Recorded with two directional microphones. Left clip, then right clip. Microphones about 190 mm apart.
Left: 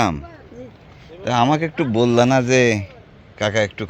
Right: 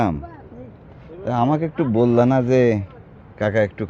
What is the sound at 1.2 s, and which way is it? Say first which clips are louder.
A man's voice: left 3 dB; 10° left (ahead or behind).